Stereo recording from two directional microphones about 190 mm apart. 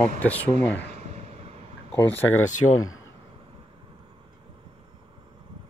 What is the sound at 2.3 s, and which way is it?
Speech, 90° left.